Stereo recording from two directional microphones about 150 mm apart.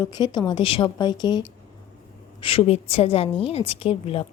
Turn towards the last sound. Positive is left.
turn(degrees=40)  # may be behind; listen again after turning